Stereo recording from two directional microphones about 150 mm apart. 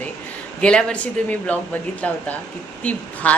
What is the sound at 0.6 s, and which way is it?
A woman's voice, 5° left (ahead or behind).